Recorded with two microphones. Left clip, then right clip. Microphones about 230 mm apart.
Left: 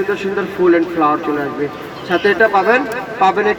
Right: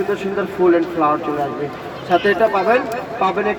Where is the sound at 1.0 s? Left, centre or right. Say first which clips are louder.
Left 2 dB; left.